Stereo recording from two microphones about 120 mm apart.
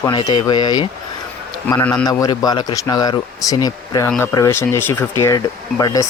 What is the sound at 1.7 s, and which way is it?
Speech, 25° left (ahead or behind).